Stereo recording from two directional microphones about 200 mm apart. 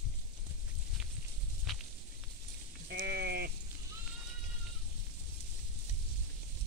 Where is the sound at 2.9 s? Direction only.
50° right (ahead or behind).